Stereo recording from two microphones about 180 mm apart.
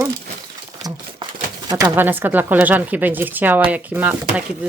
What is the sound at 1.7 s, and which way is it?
Speech, 25° right (ahead or behind).